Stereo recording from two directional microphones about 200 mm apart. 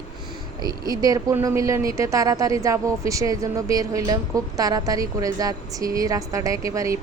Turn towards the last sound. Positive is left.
turn(degrees=-15)  # may be behind; listen again after turning